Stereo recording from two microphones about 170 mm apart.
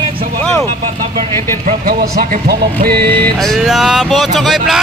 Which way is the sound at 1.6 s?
60° right (ahead or behind).